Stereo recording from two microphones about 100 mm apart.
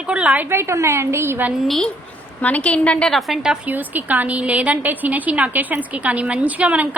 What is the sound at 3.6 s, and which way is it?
A woman's voice, 15° right (ahead or behind).